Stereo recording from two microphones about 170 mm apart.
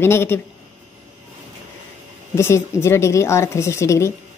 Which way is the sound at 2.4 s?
15° left (ahead or behind).